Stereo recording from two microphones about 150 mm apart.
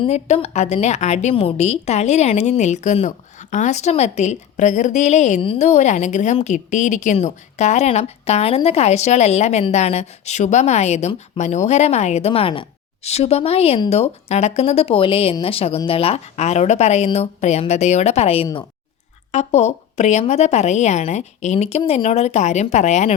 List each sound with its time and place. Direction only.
0.0 s speech: 40° left (ahead or behind)